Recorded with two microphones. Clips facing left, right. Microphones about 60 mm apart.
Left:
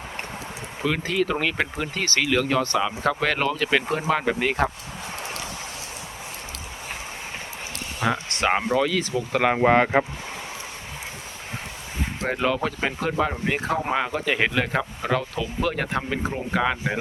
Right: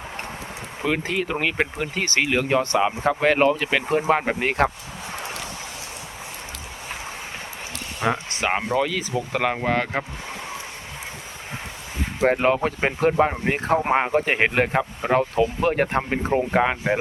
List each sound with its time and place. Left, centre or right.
0.9 s speech: right
3.7 s speech: centre
4.0 s speech: right
4.4 s speech: right
8.0 s speech: centre
9.4 s speech: centre
9.6 s speech: left
12.2 s speech: right
14.7 s speech: right
15.1 s speech: right